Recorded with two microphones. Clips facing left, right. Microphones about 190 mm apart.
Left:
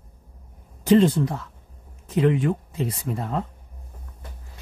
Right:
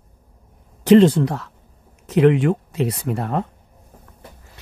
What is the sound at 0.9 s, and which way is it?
Speech, 75° right (ahead or behind).